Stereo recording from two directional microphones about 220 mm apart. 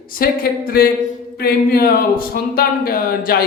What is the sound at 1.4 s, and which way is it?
Speech, 45° left (ahead or behind).